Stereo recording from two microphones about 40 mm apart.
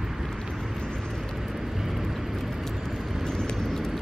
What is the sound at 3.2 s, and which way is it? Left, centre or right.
Vehicle, centre.